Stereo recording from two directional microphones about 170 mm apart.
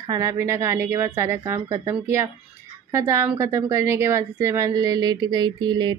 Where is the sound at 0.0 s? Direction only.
20° right (ahead or behind).